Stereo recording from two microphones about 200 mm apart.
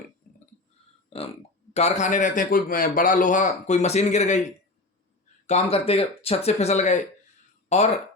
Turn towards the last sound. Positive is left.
turn(degrees=35)  # may be behind; listen again after turning